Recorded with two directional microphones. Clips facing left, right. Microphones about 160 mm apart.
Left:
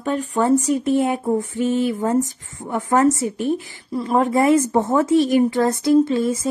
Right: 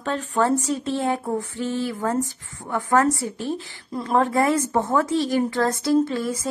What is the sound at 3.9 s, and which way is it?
Speech, 10° left (ahead or behind).